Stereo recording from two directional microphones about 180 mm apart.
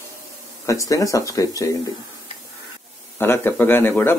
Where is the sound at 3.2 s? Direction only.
15° left (ahead or behind).